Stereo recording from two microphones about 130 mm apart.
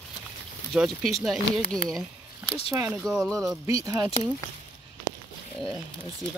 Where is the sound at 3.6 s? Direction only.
20° right (ahead or behind).